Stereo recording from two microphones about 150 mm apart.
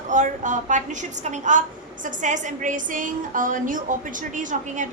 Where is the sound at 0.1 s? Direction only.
55° right (ahead or behind).